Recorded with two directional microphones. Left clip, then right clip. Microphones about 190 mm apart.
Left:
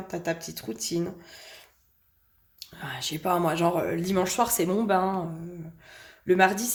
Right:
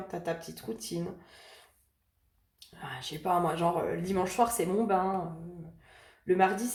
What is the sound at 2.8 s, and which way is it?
Speech, 50° left (ahead or behind).